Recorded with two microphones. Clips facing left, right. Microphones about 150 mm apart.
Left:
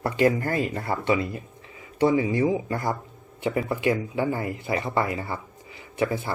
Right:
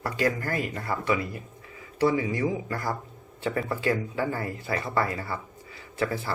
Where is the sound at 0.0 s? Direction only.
25° left (ahead or behind).